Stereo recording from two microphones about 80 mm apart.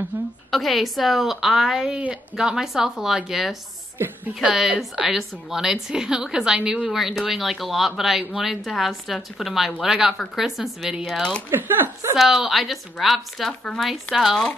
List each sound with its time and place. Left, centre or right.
0.1 s a sound: right
0.5 s a woman's voice: centre
11.5 s speech: right
12.2 s a woman's voice: centre